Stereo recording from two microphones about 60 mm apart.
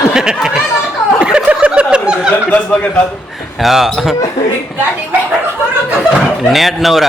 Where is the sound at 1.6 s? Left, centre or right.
Centre.